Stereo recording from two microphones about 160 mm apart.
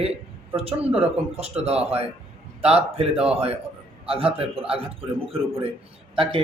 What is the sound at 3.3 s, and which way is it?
Speech, 35° right (ahead or behind).